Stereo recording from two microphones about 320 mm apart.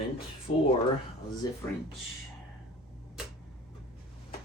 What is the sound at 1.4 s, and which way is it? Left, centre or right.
Speech, centre.